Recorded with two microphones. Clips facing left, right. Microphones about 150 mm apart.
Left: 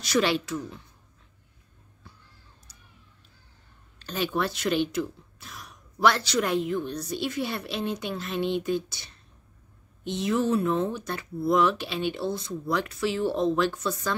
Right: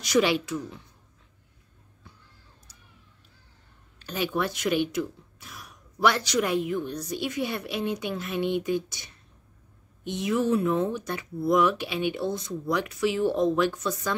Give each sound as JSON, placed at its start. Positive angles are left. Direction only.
{"t": 0.0, "sound": "speech", "side_deg": -15}
{"t": 4.0, "sound": "a sound", "side_deg": -10}
{"t": 4.4, "sound": "speech", "side_deg": -15}